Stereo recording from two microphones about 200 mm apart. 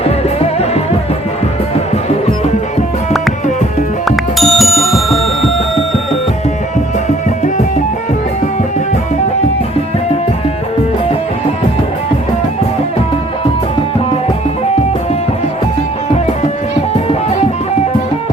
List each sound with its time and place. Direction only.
0.0 s music: 30° left (ahead or behind)
4.0 s bicycle bell: centre (ahead or behind)